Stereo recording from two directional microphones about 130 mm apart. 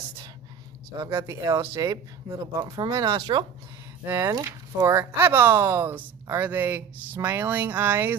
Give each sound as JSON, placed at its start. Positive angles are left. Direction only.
{"t": 0.9, "sound": "speech", "side_deg": -30}
{"t": 4.0, "sound": "speech", "side_deg": -20}